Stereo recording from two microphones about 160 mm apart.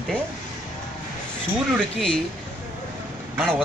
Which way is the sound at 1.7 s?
5° left (ahead or behind).